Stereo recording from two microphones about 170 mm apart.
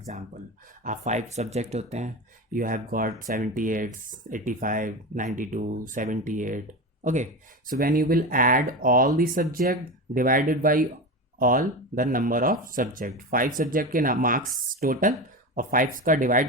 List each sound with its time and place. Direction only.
0.9 s speech: 45° right (ahead or behind)
7.7 s speech: 60° right (ahead or behind)